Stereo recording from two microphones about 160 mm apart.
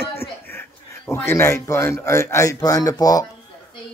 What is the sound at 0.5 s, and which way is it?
Speech, 15° left (ahead or behind).